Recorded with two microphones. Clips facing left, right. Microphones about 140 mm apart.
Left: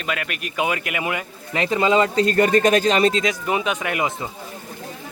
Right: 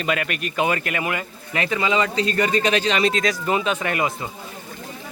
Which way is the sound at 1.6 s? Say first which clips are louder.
Left 4 dB; 40° left (ahead or behind).